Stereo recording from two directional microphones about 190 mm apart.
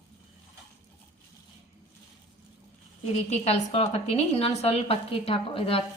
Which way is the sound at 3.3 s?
35° left (ahead or behind).